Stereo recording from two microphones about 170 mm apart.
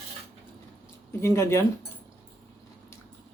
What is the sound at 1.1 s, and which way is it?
Speech, 15° left (ahead or behind).